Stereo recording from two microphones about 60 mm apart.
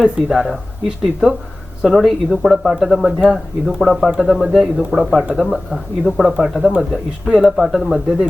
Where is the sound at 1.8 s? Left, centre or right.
Centre.